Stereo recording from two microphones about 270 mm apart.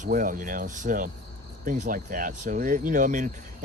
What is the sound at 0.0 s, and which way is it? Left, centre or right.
Speech, right.